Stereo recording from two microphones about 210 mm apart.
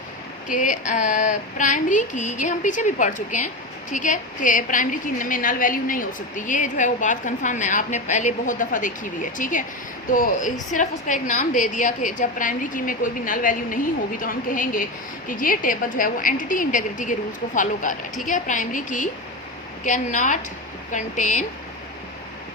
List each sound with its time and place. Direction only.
0.5 s a woman's voice: 35° left (ahead or behind)